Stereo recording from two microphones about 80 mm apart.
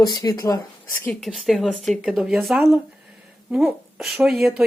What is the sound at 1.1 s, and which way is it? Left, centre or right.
Speech, centre.